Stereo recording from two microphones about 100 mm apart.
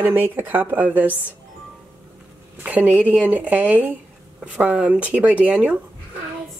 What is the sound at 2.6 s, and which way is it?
Speech, 15° right (ahead or behind).